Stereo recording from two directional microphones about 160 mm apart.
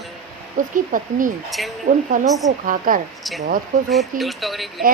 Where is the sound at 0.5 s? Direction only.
55° right (ahead or behind).